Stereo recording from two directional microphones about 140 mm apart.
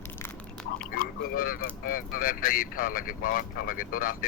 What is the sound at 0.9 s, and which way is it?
Speech, 90° left.